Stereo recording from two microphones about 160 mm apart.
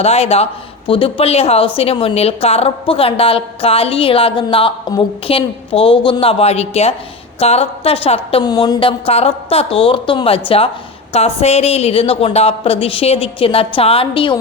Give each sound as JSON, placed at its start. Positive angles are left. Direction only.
{"t": 0.0, "sound": "a woman's voice", "side_deg": 40}
{"t": 8.4, "sound": "a woman's voice", "side_deg": 25}